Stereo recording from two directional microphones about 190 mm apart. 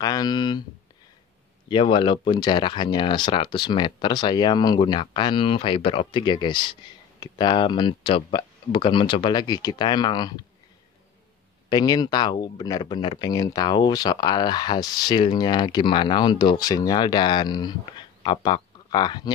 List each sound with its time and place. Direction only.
0.0 s speech: 20° left (ahead or behind)
1.7 s speech: 25° left (ahead or behind)
11.7 s speech: 20° left (ahead or behind)